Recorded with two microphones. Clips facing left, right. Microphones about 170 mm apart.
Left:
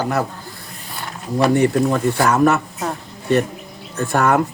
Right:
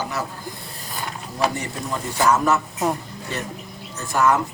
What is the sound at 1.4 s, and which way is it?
Speech, 60° left (ahead or behind).